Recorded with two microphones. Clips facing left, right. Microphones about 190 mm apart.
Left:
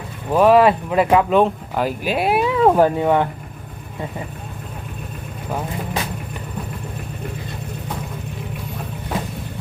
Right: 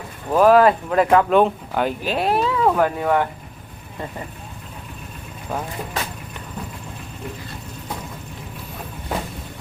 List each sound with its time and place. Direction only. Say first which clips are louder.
0.3 s speech: left 1 dB; centre (ahead or behind)
2.6 s speech: left 5 dB; 30° left (ahead or behind)